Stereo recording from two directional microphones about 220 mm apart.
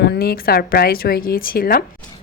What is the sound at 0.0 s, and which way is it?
A woman's voice, 45° left (ahead or behind).